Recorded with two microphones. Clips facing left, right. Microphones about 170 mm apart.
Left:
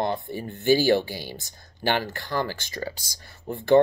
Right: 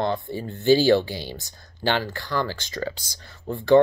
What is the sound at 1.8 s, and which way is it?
Speech, 50° left (ahead or behind).